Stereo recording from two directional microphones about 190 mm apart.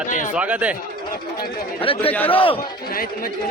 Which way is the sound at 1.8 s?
30° left (ahead or behind).